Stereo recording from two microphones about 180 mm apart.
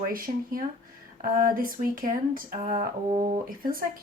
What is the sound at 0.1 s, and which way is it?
Speech, 50° right (ahead or behind).